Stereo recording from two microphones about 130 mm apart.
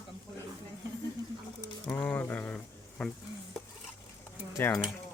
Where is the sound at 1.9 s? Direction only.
10° left (ahead or behind).